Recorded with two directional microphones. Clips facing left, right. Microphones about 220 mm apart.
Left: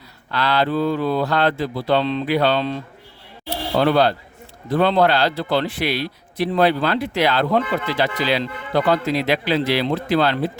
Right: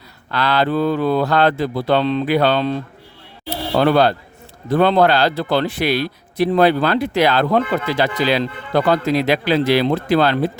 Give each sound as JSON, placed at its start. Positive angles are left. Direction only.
{"t": 0.3, "sound": "a man's voice", "side_deg": -45}
{"t": 3.8, "sound": "a man's voice", "side_deg": -50}